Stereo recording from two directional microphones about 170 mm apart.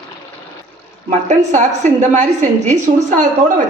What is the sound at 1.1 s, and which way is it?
A woman's voice, 45° right (ahead or behind).